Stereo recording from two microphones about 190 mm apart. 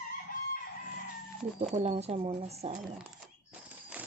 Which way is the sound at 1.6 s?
35° right (ahead or behind).